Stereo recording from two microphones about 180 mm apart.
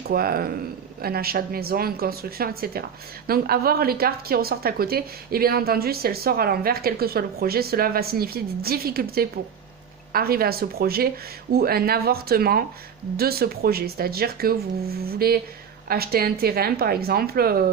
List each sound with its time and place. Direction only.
0.1 s a woman's voice: 55° right (ahead or behind)